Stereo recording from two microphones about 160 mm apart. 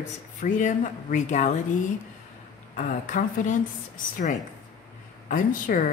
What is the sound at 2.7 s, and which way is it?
Speech, 55° left (ahead or behind).